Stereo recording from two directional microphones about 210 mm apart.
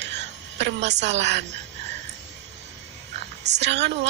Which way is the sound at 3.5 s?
55° right (ahead or behind).